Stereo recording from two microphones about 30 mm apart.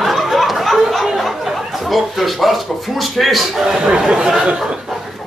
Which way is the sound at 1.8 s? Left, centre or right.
Centre.